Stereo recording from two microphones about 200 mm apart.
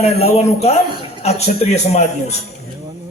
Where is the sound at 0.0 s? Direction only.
30° left (ahead or behind).